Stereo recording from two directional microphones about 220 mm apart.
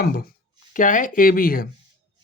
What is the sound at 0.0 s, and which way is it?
Speech, 40° left (ahead or behind).